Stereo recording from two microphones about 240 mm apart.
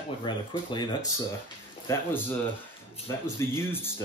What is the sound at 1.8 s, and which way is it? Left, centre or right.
Speech, centre.